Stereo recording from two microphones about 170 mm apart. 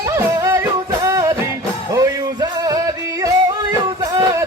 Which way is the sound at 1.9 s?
20° right (ahead or behind).